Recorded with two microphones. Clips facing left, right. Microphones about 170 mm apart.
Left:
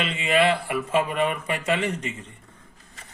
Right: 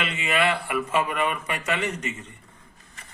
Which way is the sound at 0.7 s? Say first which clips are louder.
Left 1 dB; 30° left (ahead or behind).